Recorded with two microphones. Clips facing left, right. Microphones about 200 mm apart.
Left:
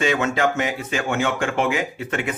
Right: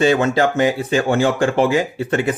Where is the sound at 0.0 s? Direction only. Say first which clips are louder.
Right 5 dB; 35° right (ahead or behind).